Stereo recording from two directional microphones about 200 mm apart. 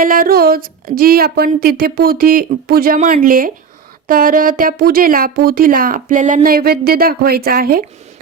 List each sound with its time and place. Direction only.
0.0 s speech: 45° right (ahead or behind)